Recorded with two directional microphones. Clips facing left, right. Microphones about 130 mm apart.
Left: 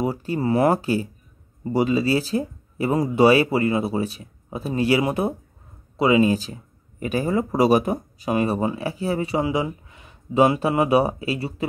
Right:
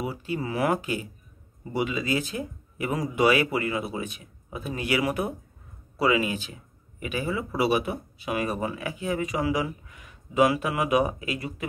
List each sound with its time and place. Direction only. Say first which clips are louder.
0.0 s speech: left 7 dB; 40° left (ahead or behind); by 6.2 s 25° left (ahead or behind)
6.2 s speech: left 10 dB; 35° left (ahead or behind)